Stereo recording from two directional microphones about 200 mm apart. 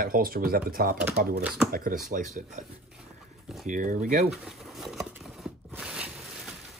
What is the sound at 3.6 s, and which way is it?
Speech, 40° right (ahead or behind).